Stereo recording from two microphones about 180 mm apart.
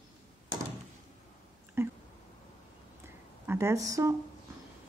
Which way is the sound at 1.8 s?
15° right (ahead or behind).